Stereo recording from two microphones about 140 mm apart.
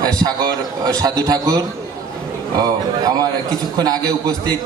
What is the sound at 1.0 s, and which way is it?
A man's voice, 25° right (ahead or behind).